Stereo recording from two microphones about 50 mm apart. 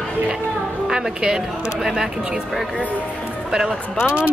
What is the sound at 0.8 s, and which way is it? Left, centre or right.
Music, centre.